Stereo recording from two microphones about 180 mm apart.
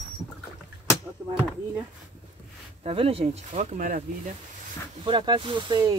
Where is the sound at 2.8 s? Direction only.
30° right (ahead or behind).